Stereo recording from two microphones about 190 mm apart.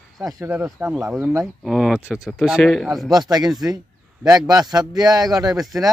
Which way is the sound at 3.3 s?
20° right (ahead or behind).